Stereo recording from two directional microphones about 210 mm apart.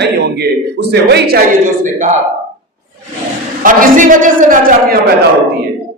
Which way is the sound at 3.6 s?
40° right (ahead or behind).